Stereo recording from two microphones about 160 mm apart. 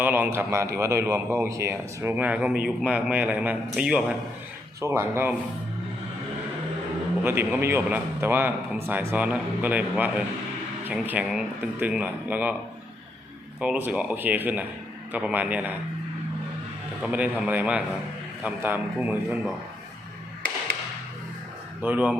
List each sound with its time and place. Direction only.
0.0 s a man's voice: 10° right (ahead or behind)
4.8 s a man's voice: 15° right (ahead or behind)
7.3 s a man's voice: 15° right (ahead or behind)
13.6 s a man's voice: 10° right (ahead or behind)
17.1 s a man's voice: 10° right (ahead or behind)
21.8 s speech: 10° right (ahead or behind)